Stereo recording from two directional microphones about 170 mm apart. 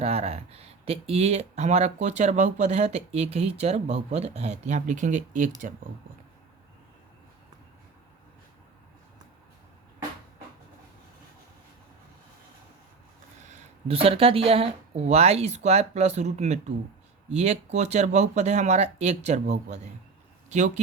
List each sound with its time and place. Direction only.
0.0 s speech: 35° right (ahead or behind)
13.5 s speech: 35° right (ahead or behind)